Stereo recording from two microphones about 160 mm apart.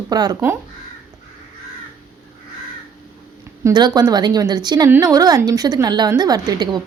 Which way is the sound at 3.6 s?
25° right (ahead or behind).